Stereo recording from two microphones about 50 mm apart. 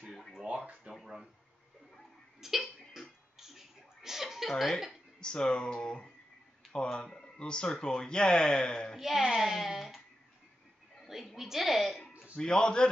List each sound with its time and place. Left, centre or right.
0.9 s a sound: right
2.4 s cough: centre
3.3 s a sound: centre
5.2 s speech: centre
8.9 s a child's voice: centre
11.1 s a child's voice: centre
12.4 s speech: centre